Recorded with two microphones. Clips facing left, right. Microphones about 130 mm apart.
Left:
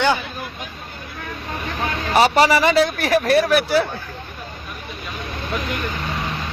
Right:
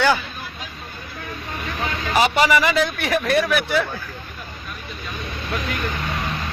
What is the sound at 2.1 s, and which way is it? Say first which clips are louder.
Speech: left 3 dB; 35° left (ahead or behind).